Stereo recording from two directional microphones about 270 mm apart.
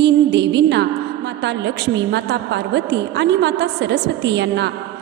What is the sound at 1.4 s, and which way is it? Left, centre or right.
A woman's voice, right.